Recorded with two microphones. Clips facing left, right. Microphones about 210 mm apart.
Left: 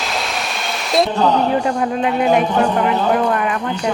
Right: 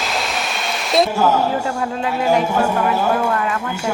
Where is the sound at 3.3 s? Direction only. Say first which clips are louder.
Left 2 dB; 20° left (ahead or behind).